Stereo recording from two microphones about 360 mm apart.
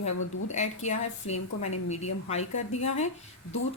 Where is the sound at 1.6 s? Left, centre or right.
Centre.